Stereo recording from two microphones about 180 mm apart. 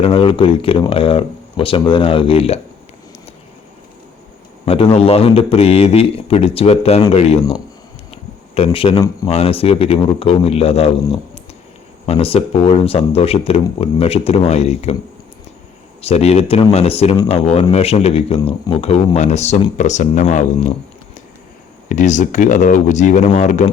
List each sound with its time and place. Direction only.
0.0 s speech: 30° left (ahead or behind)
4.6 s speech: 30° left (ahead or behind)
12.0 s speech: 30° left (ahead or behind)
16.0 s speech: 35° left (ahead or behind)
21.8 s speech: 45° left (ahead or behind)